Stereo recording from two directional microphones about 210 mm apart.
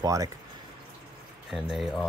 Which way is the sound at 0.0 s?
15° right (ahead or behind).